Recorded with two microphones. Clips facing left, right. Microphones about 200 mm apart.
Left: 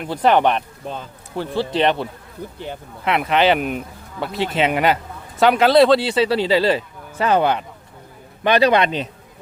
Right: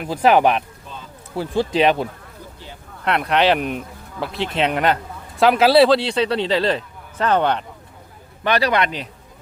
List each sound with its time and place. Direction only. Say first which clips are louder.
0.0 s speech: right 1 dB; 5° right (ahead or behind)
3.0 s speech: left 1 dB; 5° left (ahead or behind)
8.4 s a man's voice: left 4 dB; 20° left (ahead or behind)